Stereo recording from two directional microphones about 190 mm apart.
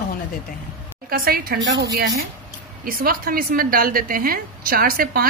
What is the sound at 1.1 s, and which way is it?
Speech, 50° right (ahead or behind).